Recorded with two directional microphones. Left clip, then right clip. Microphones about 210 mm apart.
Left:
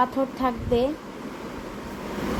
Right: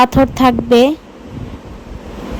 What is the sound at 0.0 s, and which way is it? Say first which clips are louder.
Speech: right 13 dB; 55° right (ahead or behind).